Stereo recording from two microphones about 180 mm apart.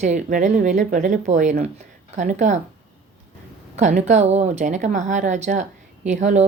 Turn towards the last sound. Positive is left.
turn(degrees=-40)  # may be behind; listen again after turning